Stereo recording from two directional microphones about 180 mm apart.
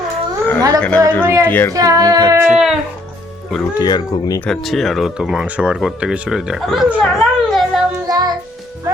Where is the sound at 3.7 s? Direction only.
20° left (ahead or behind).